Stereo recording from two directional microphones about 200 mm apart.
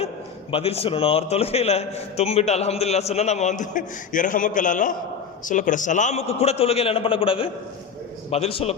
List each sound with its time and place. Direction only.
0.5 s a man's voice: 30° left (ahead or behind)